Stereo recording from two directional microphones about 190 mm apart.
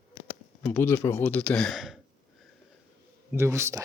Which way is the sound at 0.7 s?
10° left (ahead or behind).